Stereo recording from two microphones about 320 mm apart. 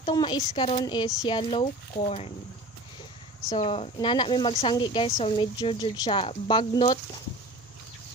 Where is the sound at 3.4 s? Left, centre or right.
Centre.